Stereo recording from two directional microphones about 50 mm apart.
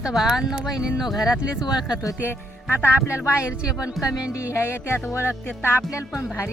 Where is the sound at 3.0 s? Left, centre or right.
Left.